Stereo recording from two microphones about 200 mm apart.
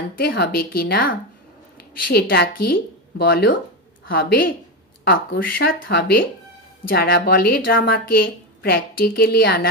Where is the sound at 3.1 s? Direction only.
50° left (ahead or behind).